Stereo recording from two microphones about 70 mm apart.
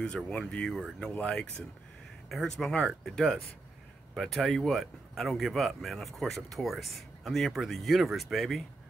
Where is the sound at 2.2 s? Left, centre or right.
Centre.